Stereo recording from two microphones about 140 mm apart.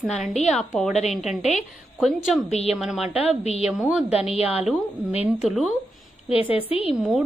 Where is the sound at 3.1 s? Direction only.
45° left (ahead or behind).